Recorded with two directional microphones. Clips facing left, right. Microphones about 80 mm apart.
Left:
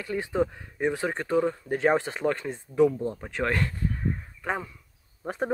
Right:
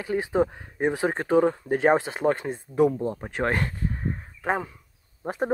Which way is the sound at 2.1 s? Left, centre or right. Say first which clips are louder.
Right 3 dB; right.